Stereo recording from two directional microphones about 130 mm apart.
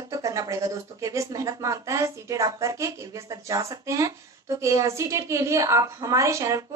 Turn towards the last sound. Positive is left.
turn(degrees=-25)  # may be behind; listen again after turning